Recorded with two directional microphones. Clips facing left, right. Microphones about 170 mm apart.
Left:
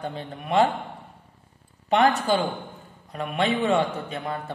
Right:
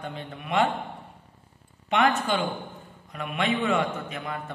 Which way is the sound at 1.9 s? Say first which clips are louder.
Left 3 dB; 35° left (ahead or behind).